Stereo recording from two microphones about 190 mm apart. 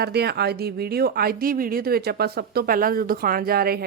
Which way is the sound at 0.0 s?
60° right (ahead or behind).